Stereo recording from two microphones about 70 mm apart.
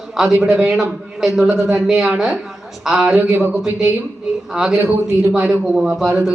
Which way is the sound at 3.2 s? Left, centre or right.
Right.